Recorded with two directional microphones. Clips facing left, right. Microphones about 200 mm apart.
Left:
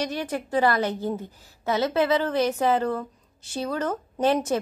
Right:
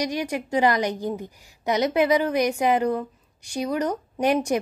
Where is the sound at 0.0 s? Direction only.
15° right (ahead or behind).